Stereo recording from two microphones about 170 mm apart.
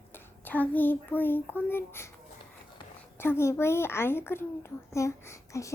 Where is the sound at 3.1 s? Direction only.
15° left (ahead or behind).